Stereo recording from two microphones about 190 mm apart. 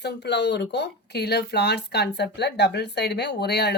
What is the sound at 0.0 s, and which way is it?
Speech, 65° left (ahead or behind).